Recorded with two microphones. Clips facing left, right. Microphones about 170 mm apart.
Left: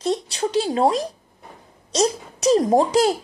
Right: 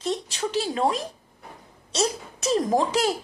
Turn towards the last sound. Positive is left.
turn(degrees=35)  # may be behind; listen again after turning